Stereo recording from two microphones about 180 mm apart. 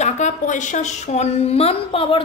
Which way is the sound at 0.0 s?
40° left (ahead or behind).